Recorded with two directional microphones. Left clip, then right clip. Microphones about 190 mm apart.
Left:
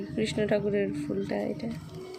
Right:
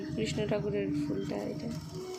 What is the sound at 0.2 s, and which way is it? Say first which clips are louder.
Speech: left 6 dB; 50° left (ahead or behind).